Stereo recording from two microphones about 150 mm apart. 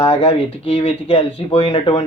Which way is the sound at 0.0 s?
40° left (ahead or behind).